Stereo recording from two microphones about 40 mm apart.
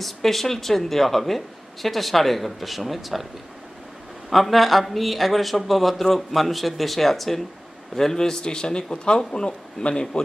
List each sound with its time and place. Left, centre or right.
0.0 s speech: centre
4.3 s a man's voice: centre; by 10.2 s left